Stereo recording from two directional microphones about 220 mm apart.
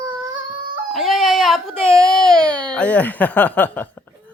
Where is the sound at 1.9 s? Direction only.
Centre (ahead or behind).